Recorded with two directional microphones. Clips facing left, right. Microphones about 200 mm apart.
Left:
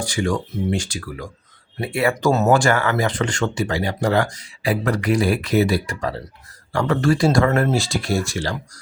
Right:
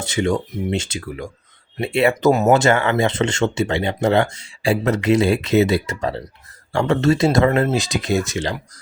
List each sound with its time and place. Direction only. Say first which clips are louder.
0.0 s speech: right 2 dB; 25° right (ahead or behind)